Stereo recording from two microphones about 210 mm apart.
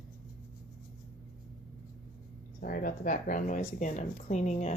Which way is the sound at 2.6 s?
45° left (ahead or behind).